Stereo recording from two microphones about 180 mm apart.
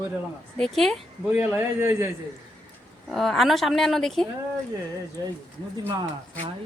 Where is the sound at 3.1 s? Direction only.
Centre (ahead or behind).